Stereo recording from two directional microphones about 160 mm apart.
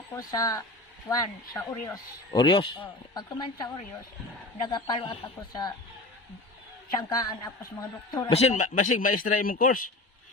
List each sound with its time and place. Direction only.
0.2 s speech: 25° left (ahead or behind)
7.1 s speech: 25° left (ahead or behind)
8.3 s speech: 40° left (ahead or behind); by 9.8 s 60° left (ahead or behind)